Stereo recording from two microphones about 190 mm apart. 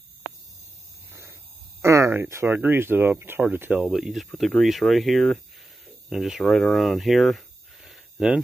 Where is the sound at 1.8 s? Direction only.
15° right (ahead or behind).